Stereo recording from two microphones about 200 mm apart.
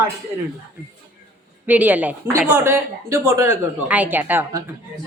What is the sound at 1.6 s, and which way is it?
A woman's voice, 10° right (ahead or behind).